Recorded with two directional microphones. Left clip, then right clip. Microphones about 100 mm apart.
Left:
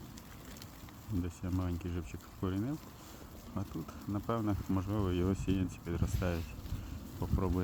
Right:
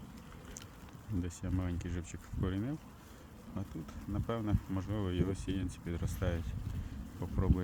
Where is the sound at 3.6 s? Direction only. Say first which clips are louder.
Left 3 dB; 15° left (ahead or behind).